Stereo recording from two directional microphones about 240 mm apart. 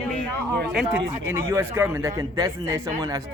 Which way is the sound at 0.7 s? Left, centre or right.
Centre.